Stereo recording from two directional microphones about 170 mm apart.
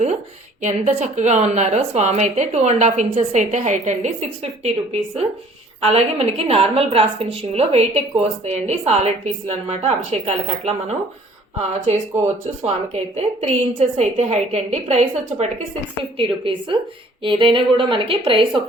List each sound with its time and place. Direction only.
0.6 s a woman's voice: 45° right (ahead or behind)
12.6 s a woman's voice: 40° right (ahead or behind)